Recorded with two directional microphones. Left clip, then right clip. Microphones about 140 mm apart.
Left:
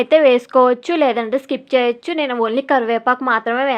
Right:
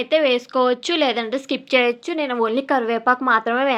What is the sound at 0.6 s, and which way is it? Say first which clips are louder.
A woman's voice: left 3 dB; 30° left (ahead or behind).